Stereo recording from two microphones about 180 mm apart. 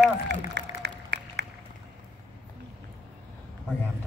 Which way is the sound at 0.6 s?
70° right (ahead or behind).